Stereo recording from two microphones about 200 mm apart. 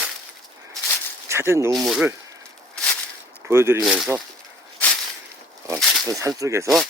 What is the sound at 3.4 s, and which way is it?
Speech, 10° right (ahead or behind).